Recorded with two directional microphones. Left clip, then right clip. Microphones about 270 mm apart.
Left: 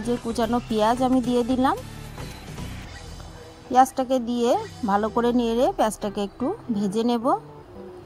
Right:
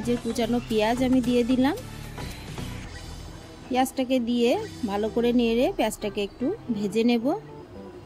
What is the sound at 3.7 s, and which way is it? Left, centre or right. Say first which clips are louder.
A woman's voice: left 6 dB; left.